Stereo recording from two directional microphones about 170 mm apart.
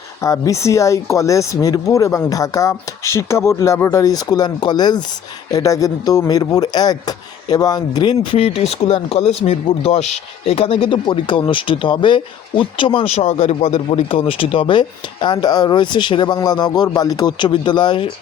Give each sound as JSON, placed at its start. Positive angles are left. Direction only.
{"t": 0.2, "sound": "speech", "side_deg": 20}